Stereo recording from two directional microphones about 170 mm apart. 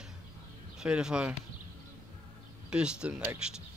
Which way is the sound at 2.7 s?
5° right (ahead or behind).